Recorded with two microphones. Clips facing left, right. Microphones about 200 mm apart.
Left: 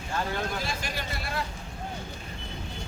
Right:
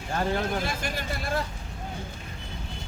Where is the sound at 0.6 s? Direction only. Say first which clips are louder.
Right 2 dB; 50° right (ahead or behind).